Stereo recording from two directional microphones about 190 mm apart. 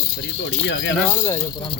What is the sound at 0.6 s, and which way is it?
Speech, 70° left (ahead or behind).